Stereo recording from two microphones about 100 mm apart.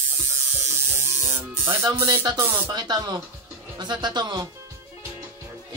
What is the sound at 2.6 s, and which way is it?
Speech, 45° right (ahead or behind).